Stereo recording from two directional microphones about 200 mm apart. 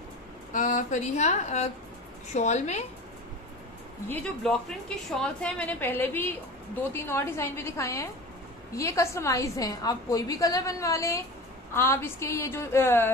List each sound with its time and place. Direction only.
0.5 s a woman's voice: 40° left (ahead or behind)
4.1 s a woman's voice: centre (ahead or behind)